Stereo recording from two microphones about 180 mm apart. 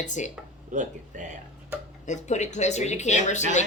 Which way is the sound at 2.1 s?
40° left (ahead or behind).